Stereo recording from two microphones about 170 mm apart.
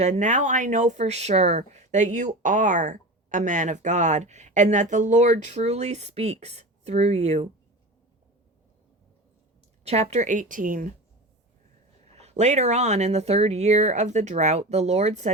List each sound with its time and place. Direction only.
0.0 s speech: 45° right (ahead or behind)
9.8 s speech: 40° right (ahead or behind); by 10.9 s 55° right (ahead or behind)
12.0 s speech: 40° right (ahead or behind)